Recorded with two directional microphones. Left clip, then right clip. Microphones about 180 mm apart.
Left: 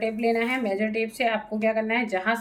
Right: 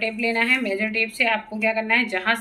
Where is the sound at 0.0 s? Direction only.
25° left (ahead or behind).